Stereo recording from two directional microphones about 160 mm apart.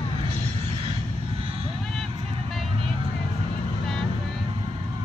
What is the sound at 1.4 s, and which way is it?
Vehicle, 35° right (ahead or behind).